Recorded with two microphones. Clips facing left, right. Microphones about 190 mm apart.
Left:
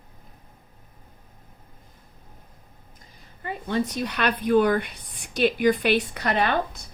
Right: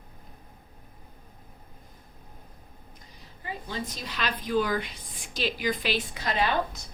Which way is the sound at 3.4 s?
60° left (ahead or behind).